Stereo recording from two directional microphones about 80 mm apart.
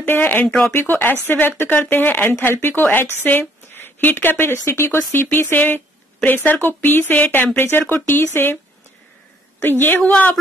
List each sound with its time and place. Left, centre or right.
0.0 s a woman's voice: left
9.6 s a woman's voice: left